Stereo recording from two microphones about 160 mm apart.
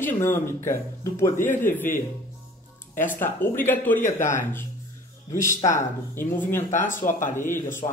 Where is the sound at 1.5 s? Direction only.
55° left (ahead or behind).